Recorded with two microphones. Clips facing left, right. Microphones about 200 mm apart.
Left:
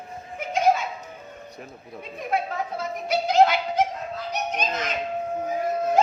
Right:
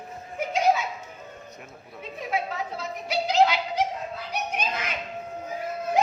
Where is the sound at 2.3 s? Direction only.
50° left (ahead or behind).